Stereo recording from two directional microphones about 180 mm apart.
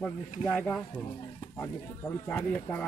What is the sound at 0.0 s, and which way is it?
Speech, 10° left (ahead or behind).